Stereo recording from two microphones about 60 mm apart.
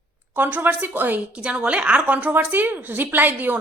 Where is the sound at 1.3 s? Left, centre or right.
Centre.